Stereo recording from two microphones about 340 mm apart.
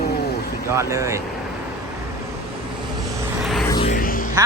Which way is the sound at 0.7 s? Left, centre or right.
Centre.